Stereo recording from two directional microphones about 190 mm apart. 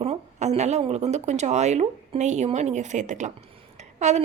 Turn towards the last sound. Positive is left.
turn(degrees=-35)  # may be behind; listen again after turning